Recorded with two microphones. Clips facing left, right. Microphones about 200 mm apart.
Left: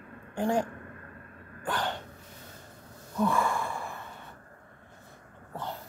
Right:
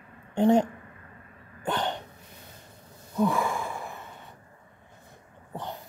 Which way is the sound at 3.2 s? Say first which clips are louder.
Right 2 dB; 15° right (ahead or behind).